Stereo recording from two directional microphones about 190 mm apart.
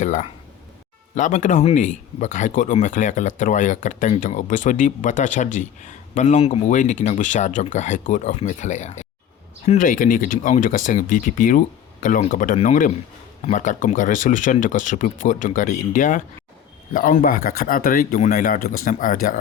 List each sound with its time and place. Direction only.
0.0 s speech: 40° left (ahead or behind)